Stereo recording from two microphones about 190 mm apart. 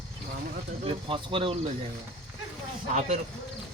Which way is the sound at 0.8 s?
25° right (ahead or behind).